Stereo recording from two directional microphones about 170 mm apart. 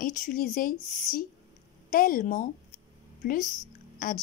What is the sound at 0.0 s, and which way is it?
Speech, 55° left (ahead or behind).